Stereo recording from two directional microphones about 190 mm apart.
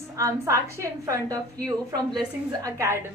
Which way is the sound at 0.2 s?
15° right (ahead or behind).